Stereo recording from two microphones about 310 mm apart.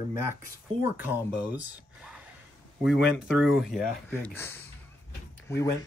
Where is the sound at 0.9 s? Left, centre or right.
Centre.